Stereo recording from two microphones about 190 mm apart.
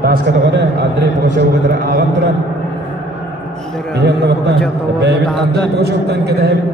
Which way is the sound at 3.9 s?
65° right (ahead or behind).